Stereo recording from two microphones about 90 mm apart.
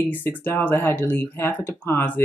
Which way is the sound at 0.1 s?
20° left (ahead or behind).